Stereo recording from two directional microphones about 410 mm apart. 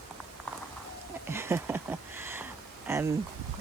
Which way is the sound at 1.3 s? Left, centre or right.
Centre.